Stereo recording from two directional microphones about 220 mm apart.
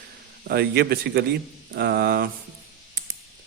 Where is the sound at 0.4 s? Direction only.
50° right (ahead or behind).